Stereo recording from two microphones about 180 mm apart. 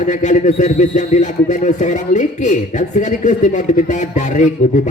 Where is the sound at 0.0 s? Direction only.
40° left (ahead or behind).